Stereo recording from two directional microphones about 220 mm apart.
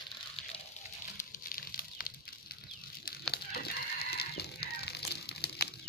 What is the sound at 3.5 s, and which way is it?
Fowl, 45° left (ahead or behind).